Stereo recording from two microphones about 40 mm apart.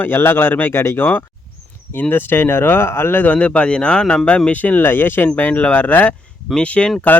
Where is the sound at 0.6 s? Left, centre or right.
Left.